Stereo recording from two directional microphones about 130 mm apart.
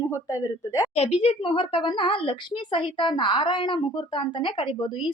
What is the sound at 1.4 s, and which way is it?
Speech, 40° left (ahead or behind).